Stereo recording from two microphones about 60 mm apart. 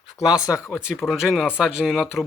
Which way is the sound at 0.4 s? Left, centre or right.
Left.